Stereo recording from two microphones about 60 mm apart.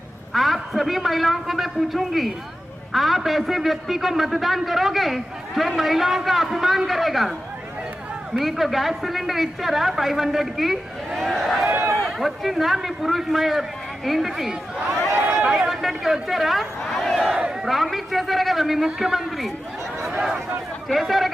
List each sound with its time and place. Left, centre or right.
0.3 s a man's voice: centre
8.4 s a man's voice: centre
15.2 s run: right
15.4 s a sound: centre
17.2 s crowd: centre
17.7 s a man's voice: centre
20.8 s a man's voice: centre